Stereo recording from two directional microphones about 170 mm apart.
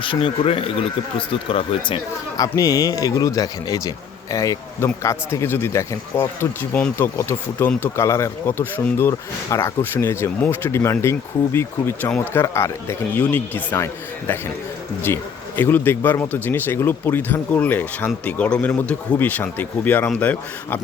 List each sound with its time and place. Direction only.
0.0 s speech: 30° left (ahead or behind)
2.4 s speech: 20° left (ahead or behind)